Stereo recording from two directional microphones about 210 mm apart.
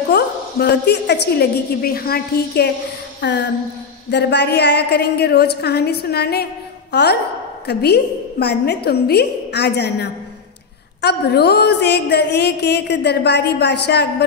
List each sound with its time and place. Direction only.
0.1 s a woman's voice: 50° left (ahead or behind)
3.2 s music: 55° left (ahead or behind)
4.1 s a woman's voice: 55° left (ahead or behind)